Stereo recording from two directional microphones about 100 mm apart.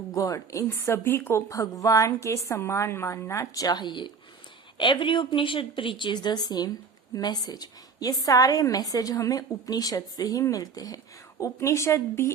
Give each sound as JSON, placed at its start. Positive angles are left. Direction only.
{"t": 0.1, "sound": "a woman's voice", "side_deg": 35}